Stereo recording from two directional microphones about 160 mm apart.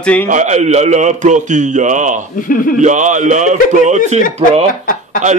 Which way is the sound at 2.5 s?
60° left (ahead or behind).